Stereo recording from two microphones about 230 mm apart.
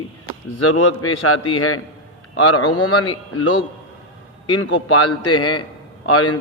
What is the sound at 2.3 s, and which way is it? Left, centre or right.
A man's voice, left.